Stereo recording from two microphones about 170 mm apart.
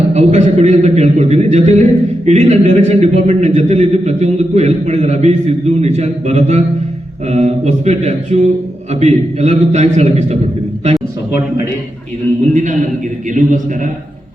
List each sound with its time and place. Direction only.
0.1 s a man's voice: 40° right (ahead or behind)
13.2 s a man's voice: 50° right (ahead or behind)